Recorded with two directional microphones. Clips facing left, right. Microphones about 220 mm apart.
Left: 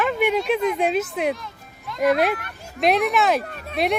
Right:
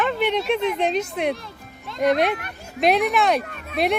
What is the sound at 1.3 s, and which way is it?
Music, 30° right (ahead or behind).